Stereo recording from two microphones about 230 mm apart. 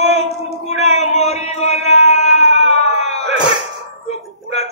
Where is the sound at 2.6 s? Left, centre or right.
Left.